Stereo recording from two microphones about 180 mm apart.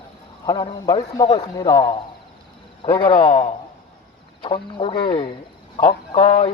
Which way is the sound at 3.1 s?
50° left (ahead or behind).